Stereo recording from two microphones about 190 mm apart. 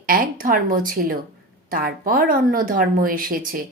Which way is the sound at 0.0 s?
50° right (ahead or behind).